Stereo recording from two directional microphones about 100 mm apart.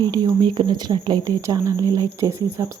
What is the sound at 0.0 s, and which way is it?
Speech, 45° right (ahead or behind).